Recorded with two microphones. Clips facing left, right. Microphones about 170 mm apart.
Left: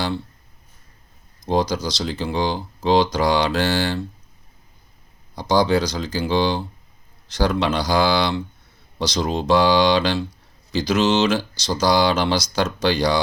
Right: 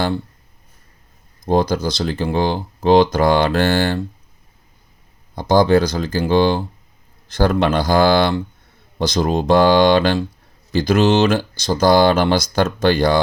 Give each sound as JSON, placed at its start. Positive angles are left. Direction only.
{"t": 1.5, "sound": "speech", "side_deg": -55}
{"t": 5.3, "sound": "speech", "side_deg": -50}